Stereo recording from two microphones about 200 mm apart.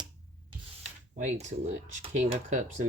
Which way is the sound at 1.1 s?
35° right (ahead or behind).